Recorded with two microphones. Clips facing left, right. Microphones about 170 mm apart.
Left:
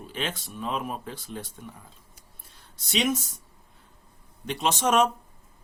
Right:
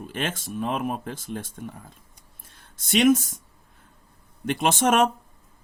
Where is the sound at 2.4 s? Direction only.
50° right (ahead or behind).